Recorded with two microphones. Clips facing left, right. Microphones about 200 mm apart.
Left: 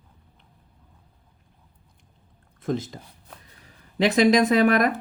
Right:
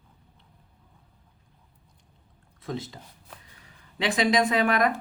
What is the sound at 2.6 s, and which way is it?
Speech, 50° left (ahead or behind).